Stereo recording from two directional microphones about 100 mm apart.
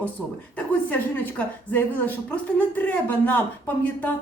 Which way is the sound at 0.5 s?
15° left (ahead or behind).